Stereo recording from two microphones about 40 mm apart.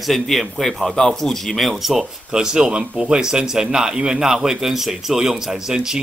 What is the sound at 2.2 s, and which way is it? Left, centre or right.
A man's voice, centre.